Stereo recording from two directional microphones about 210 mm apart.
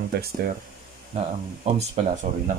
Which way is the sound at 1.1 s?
30° right (ahead or behind).